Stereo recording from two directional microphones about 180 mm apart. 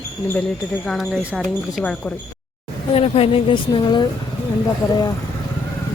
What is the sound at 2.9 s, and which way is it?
Speech, 35° left (ahead or behind).